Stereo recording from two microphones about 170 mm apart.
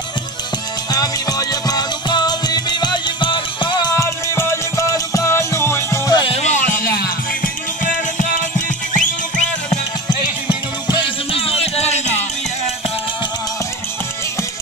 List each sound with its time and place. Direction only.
0.9 s music: 20° left (ahead or behind); by 9.1 s 50° left (ahead or behind)
10.9 s music: 30° left (ahead or behind)